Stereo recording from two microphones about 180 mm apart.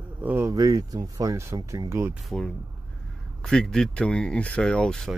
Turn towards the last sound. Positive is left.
turn(degrees=5)  # may be behind; listen again after turning